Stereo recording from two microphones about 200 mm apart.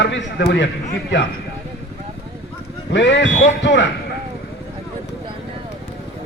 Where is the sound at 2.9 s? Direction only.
65° left (ahead or behind).